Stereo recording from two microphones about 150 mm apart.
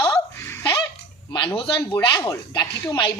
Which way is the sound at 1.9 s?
15° left (ahead or behind).